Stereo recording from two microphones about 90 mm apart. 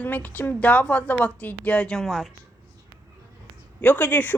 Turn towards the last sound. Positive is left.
turn(degrees=20)  # may be behind; listen again after turning